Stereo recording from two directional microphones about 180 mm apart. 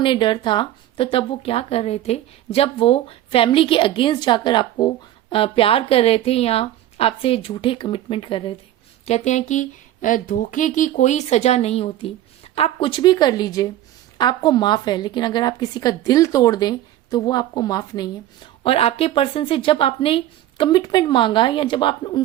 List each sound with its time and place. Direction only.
0.0 s a woman's voice: 25° left (ahead or behind)
18.6 s speech: 30° left (ahead or behind)